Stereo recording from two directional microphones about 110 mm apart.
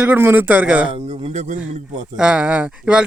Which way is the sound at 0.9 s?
70° right (ahead or behind).